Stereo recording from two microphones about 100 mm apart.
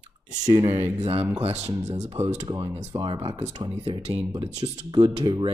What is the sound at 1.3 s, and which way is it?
Speech, 90° right.